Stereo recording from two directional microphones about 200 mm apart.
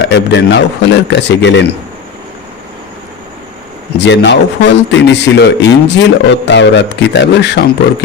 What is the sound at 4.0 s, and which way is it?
Speech, 60° left (ahead or behind).